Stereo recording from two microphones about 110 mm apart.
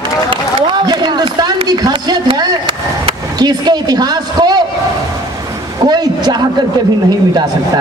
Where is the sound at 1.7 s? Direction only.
40° right (ahead or behind).